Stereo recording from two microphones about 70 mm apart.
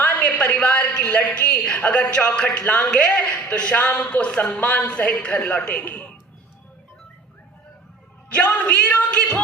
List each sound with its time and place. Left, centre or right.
0.0 s a woman's voice: centre
8.3 s a man's voice: left